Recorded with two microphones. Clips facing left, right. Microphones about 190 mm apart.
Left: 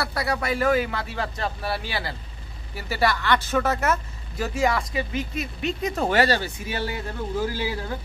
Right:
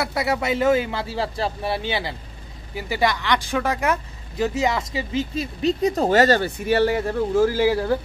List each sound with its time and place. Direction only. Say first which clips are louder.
0.0 s speech: right 3 dB; 20° right (ahead or behind); by 6.5 s 45° right (ahead or behind)
6.7 s a man's voice: right 12 dB; 70° right (ahead or behind)